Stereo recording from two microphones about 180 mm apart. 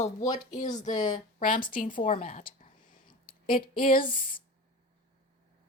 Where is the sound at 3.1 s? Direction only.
50° left (ahead or behind).